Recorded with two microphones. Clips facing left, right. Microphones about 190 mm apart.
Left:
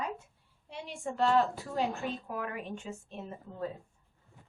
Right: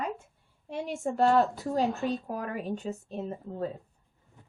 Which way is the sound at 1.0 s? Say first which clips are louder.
Right 4 dB; 40° right (ahead or behind).